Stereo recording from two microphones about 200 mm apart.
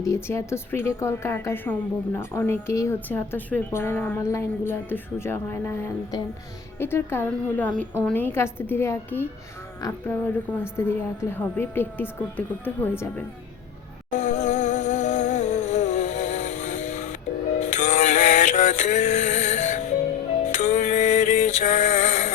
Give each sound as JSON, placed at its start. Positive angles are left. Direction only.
{"t": 0.0, "sound": "a woman's voice", "side_deg": 15}
{"t": 14.1, "sound": "music", "side_deg": 35}